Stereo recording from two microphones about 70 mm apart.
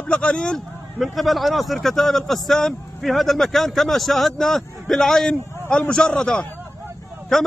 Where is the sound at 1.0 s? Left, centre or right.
Centre.